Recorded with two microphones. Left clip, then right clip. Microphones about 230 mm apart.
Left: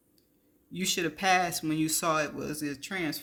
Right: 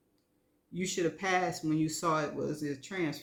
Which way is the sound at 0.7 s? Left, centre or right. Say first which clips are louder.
Left 2 dB; left.